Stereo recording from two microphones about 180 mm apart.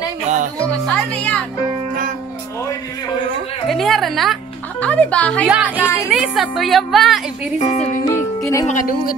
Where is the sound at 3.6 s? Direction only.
Centre (ahead or behind).